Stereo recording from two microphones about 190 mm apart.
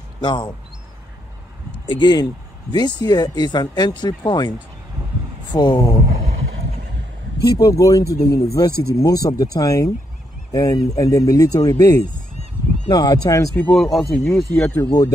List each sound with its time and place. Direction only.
0.2 s speech: 25° left (ahead or behind)
1.9 s speech: 25° left (ahead or behind)
7.5 s speech: 15° left (ahead or behind)
13.7 s speech: centre (ahead or behind)
14.9 s speech: 20° left (ahead or behind)